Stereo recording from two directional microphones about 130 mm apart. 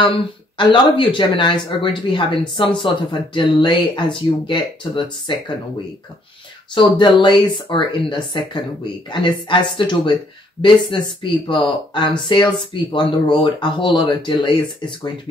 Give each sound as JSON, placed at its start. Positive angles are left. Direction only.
{"t": 0.6, "sound": "speech", "side_deg": 40}
{"t": 6.7, "sound": "speech", "side_deg": 40}